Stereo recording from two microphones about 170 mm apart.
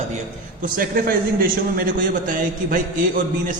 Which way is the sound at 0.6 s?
55° right (ahead or behind).